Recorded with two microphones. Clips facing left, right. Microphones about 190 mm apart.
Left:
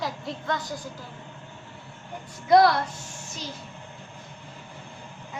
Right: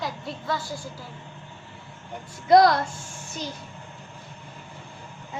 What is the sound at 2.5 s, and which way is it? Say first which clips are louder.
Speech: right 2 dB; 40° right (ahead or behind).